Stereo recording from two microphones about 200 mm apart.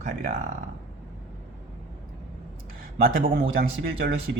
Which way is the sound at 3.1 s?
45° right (ahead or behind).